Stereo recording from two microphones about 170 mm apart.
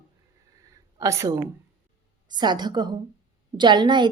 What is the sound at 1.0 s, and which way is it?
A woman's voice, 20° right (ahead or behind).